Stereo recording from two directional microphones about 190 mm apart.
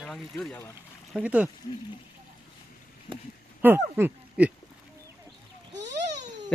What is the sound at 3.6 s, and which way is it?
Speech, 10° right (ahead or behind).